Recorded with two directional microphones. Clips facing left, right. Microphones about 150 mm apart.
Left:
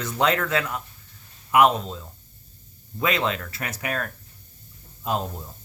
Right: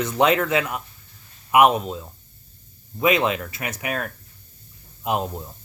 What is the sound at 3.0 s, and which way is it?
Speech, 20° right (ahead or behind).